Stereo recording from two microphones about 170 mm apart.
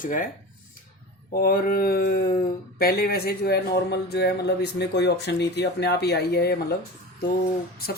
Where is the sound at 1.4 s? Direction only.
60° left (ahead or behind).